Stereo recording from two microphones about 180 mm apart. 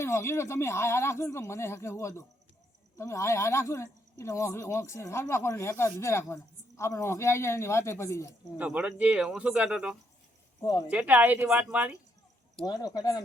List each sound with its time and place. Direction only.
0.0 s speech: 15° left (ahead or behind)
8.5 s speech: 10° right (ahead or behind)
10.6 s speech: 20° left (ahead or behind)
10.8 s speech: 10° right (ahead or behind)
12.6 s speech: 20° left (ahead or behind)